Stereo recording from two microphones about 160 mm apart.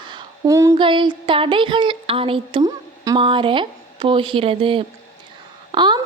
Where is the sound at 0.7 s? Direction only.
30° right (ahead or behind).